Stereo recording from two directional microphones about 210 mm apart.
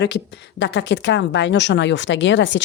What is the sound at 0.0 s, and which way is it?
A woman's voice, 55° left (ahead or behind).